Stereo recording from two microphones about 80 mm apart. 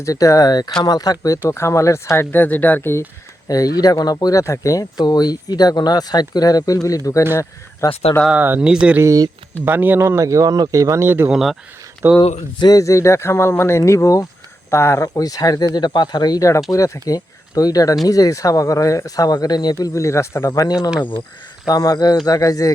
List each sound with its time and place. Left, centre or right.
0.0 s speech: left
1.5 s speech: left
2.3 s speech: left
3.5 s speech: left
8.3 s speech: right
8.7 s speech: centre
9.0 s speech: right
9.6 s speech: right
11.3 s speech: centre
12.0 s speech: right
12.7 s speech: left
19.8 s speech: left
20.5 s speech: left
22.3 s speech: left